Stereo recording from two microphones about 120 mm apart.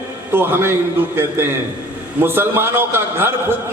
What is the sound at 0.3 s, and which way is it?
Speech, 20° right (ahead or behind).